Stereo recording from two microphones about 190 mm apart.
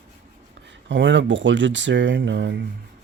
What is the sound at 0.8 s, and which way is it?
A man's voice, 70° right (ahead or behind).